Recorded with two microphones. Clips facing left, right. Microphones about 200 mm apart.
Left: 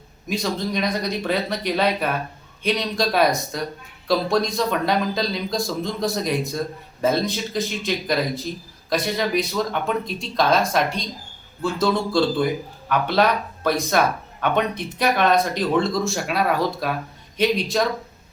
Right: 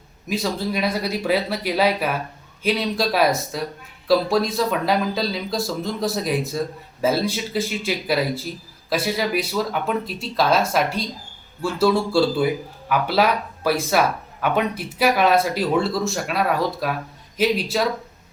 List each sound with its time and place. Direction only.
0.3 s speech: 5° right (ahead or behind)